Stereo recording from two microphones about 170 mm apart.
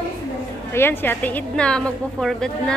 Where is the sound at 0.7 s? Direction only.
15° left (ahead or behind).